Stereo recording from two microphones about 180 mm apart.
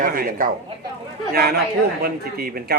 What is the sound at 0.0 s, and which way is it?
A man's voice, 50° right (ahead or behind).